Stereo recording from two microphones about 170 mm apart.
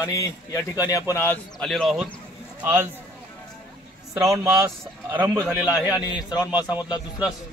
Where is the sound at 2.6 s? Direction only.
10° right (ahead or behind).